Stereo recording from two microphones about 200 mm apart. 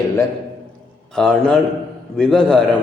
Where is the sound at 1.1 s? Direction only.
Centre (ahead or behind).